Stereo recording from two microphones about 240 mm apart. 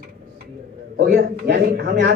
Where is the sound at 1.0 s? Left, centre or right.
Right.